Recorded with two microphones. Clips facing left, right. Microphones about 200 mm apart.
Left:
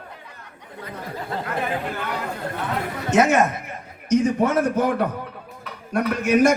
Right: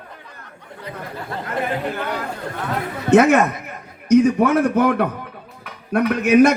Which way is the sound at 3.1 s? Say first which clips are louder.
Right 5 dB; 60° right (ahead or behind).